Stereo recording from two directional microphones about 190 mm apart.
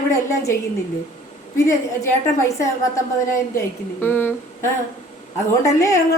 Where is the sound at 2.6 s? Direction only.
15° left (ahead or behind).